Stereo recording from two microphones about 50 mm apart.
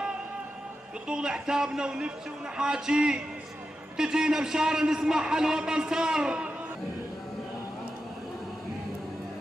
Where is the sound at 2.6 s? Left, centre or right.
Centre.